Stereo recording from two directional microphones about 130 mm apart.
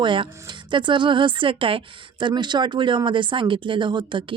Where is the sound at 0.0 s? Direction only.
40° right (ahead or behind).